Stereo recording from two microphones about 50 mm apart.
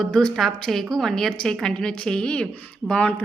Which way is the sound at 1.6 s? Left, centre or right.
Centre.